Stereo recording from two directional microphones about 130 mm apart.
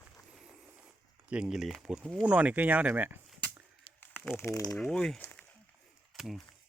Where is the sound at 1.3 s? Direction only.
5° right (ahead or behind).